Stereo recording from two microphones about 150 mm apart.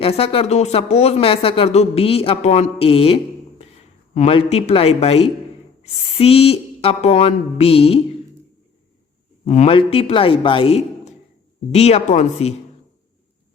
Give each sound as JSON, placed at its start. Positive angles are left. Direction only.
{"t": 0.0, "sound": "a man's voice", "side_deg": 40}
{"t": 9.4, "sound": "a man's voice", "side_deg": 45}